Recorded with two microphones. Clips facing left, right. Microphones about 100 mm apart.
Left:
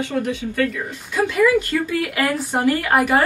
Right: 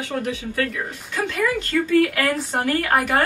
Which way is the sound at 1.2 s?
15° left (ahead or behind).